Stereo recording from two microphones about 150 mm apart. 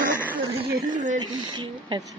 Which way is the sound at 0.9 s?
55° right (ahead or behind).